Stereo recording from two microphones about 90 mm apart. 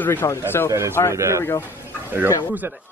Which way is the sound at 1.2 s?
35° right (ahead or behind).